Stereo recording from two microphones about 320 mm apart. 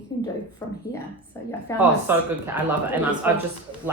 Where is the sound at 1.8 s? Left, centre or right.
Centre.